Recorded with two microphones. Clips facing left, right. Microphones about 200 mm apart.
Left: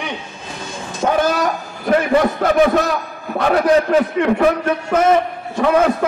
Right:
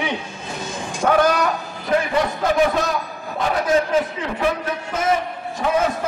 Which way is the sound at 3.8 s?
65° left (ahead or behind).